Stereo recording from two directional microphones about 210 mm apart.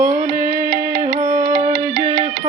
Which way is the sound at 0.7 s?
50° right (ahead or behind).